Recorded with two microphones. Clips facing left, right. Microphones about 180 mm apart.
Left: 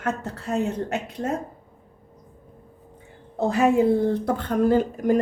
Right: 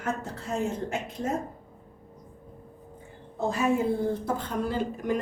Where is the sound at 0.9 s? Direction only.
65° left (ahead or behind).